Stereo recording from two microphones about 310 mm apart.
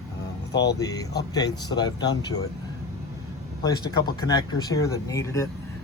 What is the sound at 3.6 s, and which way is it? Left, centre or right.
Speech, centre.